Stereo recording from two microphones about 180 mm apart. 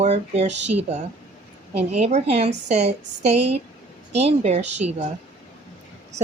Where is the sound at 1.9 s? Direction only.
35° right (ahead or behind).